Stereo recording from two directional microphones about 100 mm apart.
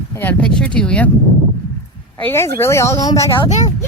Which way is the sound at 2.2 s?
25° left (ahead or behind).